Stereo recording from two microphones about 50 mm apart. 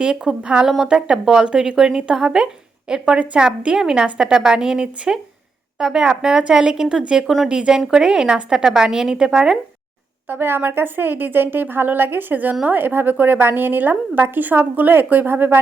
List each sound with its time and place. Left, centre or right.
0.0 s a woman's voice: centre
3.2 s a woman's voice: right
10.2 s a woman's voice: right